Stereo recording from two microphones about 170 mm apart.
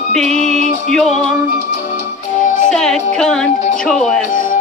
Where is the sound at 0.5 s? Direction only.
40° right (ahead or behind).